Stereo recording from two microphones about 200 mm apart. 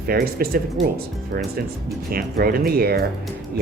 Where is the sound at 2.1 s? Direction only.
45° right (ahead or behind).